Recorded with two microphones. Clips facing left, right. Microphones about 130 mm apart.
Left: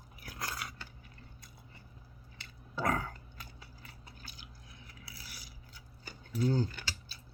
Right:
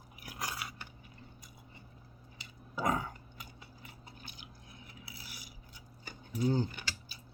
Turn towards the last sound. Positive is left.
turn(degrees=-20)  # may be behind; listen again after turning